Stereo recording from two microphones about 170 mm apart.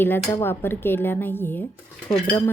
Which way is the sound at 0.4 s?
15° left (ahead or behind).